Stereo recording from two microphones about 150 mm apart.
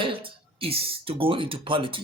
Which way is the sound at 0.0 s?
35° right (ahead or behind).